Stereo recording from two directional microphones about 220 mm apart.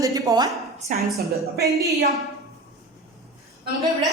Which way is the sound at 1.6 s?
45° right (ahead or behind).